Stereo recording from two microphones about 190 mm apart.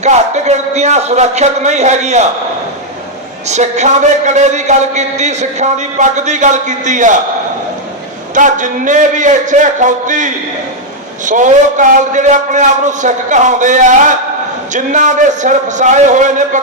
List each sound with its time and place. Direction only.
0.0 s a man's voice: 35° right (ahead or behind)
3.5 s a man's voice: 35° right (ahead or behind)
8.4 s a man's voice: 40° right (ahead or behind)